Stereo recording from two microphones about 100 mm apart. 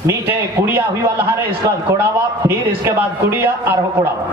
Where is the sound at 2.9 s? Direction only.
20° right (ahead or behind).